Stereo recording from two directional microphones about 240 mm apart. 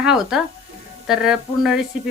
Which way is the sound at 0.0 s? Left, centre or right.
Centre.